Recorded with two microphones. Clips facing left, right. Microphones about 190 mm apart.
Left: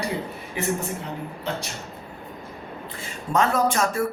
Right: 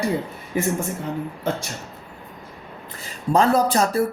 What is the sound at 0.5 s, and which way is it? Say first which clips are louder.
Speech: right 5 dB; 45° right (ahead or behind).